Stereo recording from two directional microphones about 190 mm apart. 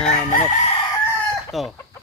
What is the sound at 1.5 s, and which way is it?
Chicken, centre (ahead or behind).